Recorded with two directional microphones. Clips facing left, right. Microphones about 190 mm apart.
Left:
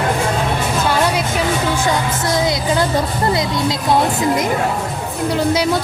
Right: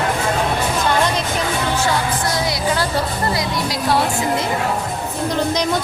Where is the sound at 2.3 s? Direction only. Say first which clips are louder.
Left 6 dB; 20° left (ahead or behind).